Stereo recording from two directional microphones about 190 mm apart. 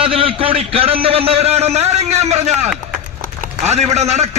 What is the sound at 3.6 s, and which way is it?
Speech, 35° right (ahead or behind).